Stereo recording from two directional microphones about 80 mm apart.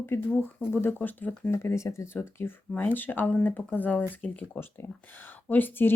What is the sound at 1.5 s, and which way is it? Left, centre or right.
Speech, left.